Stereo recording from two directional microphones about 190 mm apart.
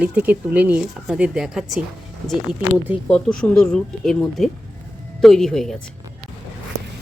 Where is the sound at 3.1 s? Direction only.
5° left (ahead or behind).